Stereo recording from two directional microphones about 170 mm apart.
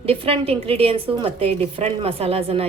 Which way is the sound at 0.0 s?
35° right (ahead or behind).